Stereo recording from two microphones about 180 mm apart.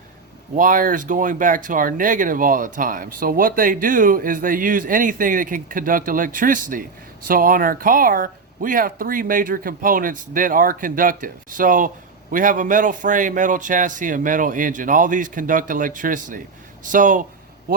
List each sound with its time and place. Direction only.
0.5 s speech: 50° right (ahead or behind)